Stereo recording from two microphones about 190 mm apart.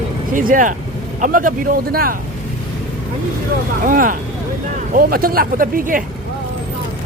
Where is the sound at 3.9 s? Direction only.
45° right (ahead or behind).